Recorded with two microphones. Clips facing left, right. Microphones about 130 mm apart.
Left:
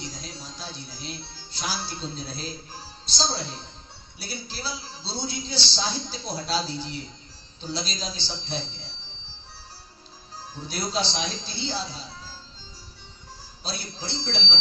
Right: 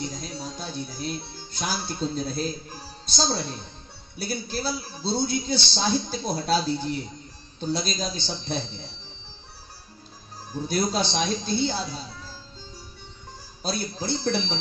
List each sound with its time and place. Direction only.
0.0 s a man's voice: 50° right (ahead or behind)
10.7 s a man's voice: 50° right (ahead or behind)
13.6 s a man's voice: 50° right (ahead or behind)